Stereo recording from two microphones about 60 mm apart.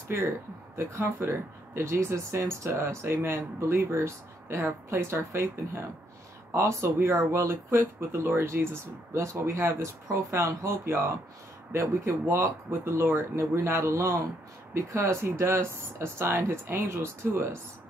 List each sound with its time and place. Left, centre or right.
0.7 s speech: right